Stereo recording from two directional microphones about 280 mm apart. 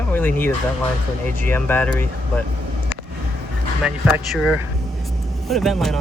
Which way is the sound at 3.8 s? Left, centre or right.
Centre.